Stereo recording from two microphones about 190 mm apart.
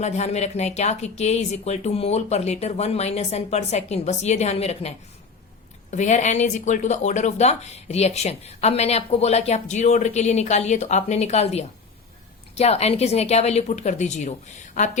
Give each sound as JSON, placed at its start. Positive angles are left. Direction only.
{"t": 0.0, "sound": "speech", "side_deg": 35}